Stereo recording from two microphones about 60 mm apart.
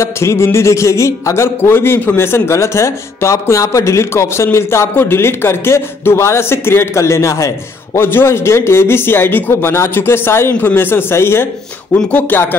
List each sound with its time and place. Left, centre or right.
0.0 s speech: left
1.6 s speech: left
8.0 s speech: left
11.9 s speech: left